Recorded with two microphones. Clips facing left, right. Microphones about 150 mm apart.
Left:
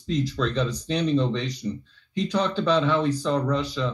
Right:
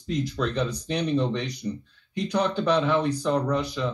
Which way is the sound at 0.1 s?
60° right (ahead or behind).